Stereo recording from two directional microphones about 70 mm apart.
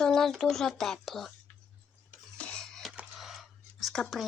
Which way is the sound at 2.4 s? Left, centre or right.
Centre.